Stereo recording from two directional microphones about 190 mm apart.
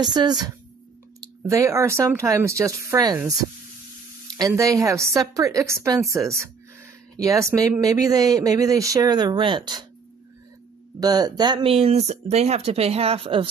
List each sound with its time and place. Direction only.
0.0 s speech: 20° right (ahead or behind)
4.4 s speech: 15° right (ahead or behind)
7.2 s speech: 15° right (ahead or behind)
11.0 s speech: 20° right (ahead or behind)